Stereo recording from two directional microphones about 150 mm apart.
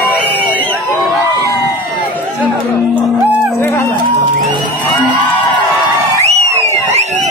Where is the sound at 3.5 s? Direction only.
20° left (ahead or behind).